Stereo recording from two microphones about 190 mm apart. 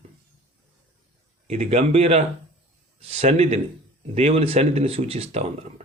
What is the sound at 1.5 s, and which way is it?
Speech, 35° right (ahead or behind).